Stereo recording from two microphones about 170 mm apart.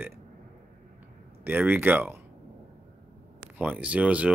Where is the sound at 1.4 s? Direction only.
10° right (ahead or behind).